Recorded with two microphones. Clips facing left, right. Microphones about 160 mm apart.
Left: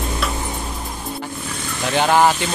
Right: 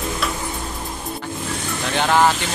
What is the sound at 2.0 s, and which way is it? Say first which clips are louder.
Speech: left 2 dB; 15° left (ahead or behind).